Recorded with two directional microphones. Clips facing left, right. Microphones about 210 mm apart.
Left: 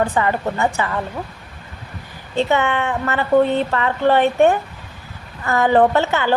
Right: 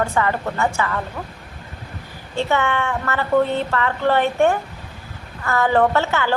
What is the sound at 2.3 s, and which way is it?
A woman's voice, 20° left (ahead or behind).